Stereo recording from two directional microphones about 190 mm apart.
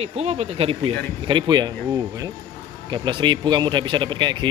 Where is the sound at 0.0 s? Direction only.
35° right (ahead or behind).